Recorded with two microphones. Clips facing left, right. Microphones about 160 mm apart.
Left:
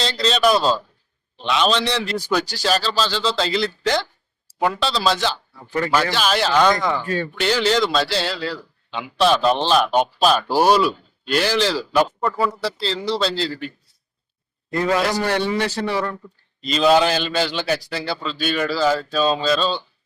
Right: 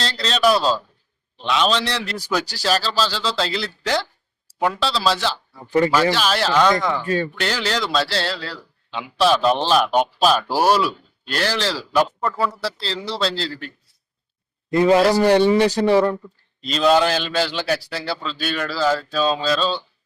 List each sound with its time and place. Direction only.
0.0 s a man's voice: centre (ahead or behind)
14.7 s a man's voice: 20° right (ahead or behind)
16.6 s a man's voice: centre (ahead or behind)